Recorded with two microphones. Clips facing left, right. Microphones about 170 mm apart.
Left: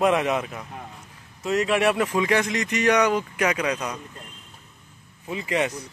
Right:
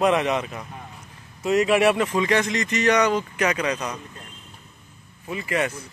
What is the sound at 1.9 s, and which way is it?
Speech, 5° left (ahead or behind).